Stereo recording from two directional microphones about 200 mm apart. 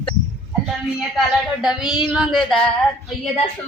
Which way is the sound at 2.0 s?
Centre (ahead or behind).